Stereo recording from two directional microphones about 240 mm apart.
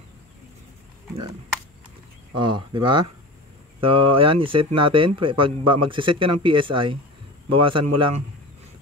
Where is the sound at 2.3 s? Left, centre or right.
Centre.